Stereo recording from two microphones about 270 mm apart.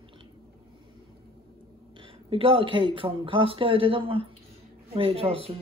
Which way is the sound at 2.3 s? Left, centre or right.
Right.